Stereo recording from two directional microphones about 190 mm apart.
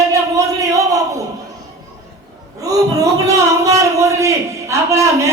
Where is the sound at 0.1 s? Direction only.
15° right (ahead or behind).